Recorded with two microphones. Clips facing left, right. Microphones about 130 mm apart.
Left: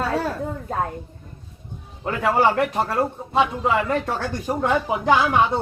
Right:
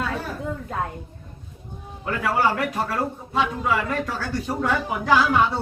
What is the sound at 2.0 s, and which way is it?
A man's voice, 25° left (ahead or behind).